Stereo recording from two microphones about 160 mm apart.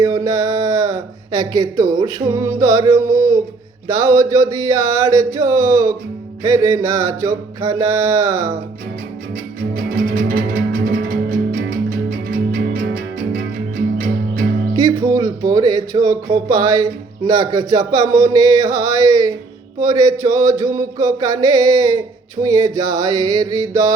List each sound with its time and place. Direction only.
0.0 s speech: 25° right (ahead or behind)
9.7 s music: 70° right (ahead or behind)
14.8 s speech: 25° right (ahead or behind)